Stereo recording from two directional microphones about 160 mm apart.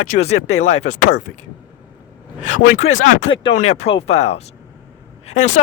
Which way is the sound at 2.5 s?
50° left (ahead or behind).